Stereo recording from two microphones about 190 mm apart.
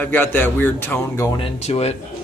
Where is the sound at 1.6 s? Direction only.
35° left (ahead or behind).